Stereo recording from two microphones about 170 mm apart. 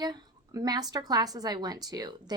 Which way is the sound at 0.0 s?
25° right (ahead or behind).